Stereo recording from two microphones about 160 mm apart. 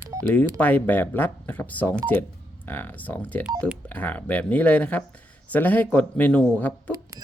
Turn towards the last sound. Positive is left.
turn(degrees=10)  # may be behind; listen again after turning